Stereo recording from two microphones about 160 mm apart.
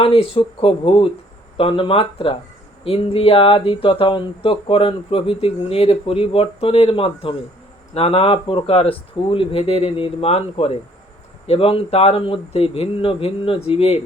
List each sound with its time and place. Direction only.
0.0 s speech: 35° left (ahead or behind)